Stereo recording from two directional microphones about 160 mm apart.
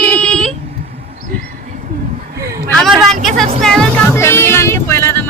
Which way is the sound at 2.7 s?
Centre (ahead or behind).